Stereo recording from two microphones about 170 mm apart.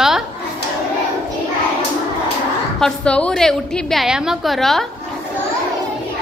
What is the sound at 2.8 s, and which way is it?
A woman's voice, 5° left (ahead or behind).